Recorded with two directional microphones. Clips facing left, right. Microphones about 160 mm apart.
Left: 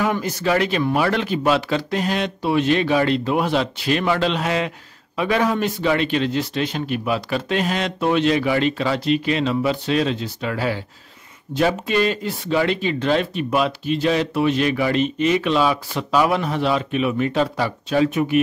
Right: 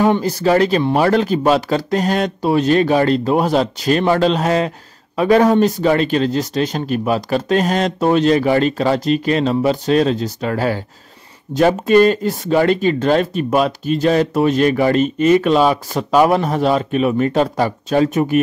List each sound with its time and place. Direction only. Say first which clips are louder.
0.0 s speech: right 6 dB; 35° right (ahead or behind)